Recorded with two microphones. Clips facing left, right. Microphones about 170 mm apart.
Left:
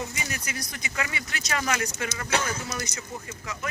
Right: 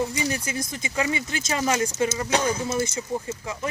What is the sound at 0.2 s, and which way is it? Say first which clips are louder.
Speech: right 8 dB; 35° right (ahead or behind).